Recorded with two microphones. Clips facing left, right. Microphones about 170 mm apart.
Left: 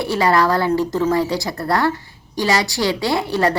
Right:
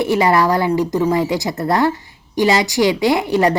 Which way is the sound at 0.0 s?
20° right (ahead or behind).